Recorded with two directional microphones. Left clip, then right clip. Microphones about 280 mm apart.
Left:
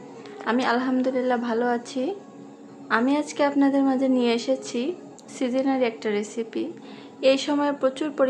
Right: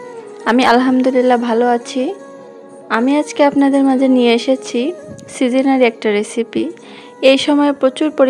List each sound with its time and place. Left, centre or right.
0.5 s a woman's voice: right